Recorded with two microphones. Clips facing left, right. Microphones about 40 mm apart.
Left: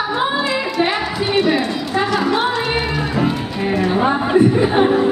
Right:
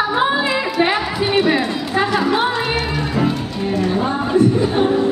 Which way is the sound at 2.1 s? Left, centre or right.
Centre.